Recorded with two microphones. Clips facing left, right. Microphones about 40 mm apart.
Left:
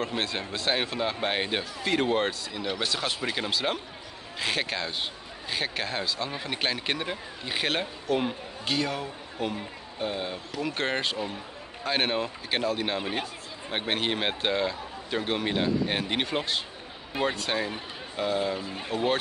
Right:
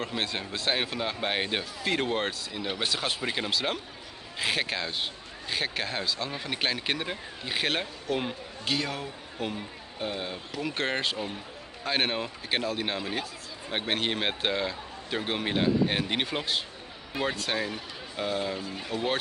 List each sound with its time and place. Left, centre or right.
0.2 s speech: centre
13.0 s speech: left
13.7 s speech: centre
18.6 s speech: centre